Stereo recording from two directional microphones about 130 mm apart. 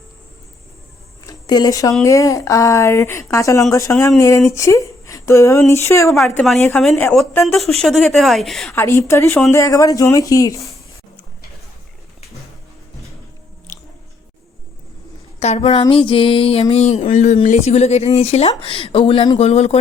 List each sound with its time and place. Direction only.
1.3 s a woman's voice: 30° left (ahead or behind); by 7.2 s 10° left (ahead or behind)
7.4 s a woman's voice: centre (ahead or behind)
8.7 s a woman's voice: 20° left (ahead or behind)
15.4 s a sound: 55° left (ahead or behind)